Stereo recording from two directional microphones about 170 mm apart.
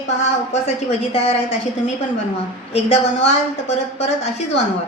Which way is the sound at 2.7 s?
40° left (ahead or behind).